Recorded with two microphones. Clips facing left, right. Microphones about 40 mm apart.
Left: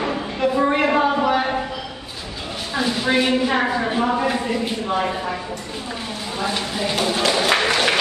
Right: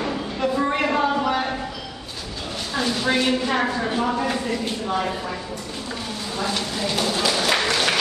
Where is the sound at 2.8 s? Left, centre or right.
Centre.